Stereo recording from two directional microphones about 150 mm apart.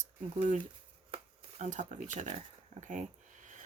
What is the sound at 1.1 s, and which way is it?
Speech, 50° right (ahead or behind).